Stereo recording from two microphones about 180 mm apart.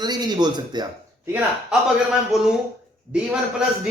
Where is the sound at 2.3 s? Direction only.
Centre (ahead or behind).